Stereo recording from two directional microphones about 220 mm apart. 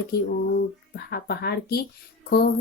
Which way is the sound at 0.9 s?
45° left (ahead or behind).